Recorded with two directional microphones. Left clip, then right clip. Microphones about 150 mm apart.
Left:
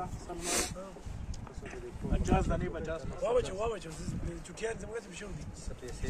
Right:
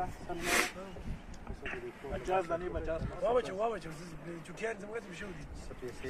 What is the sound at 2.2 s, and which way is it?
Speech, 25° left (ahead or behind).